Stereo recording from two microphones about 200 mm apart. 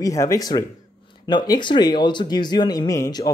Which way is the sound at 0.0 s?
15° left (ahead or behind).